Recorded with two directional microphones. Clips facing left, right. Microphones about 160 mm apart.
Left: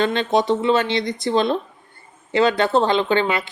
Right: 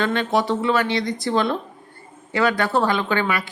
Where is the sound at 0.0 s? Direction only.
20° left (ahead or behind).